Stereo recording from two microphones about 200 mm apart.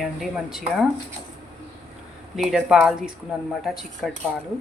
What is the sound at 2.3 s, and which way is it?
Speech, centre (ahead or behind).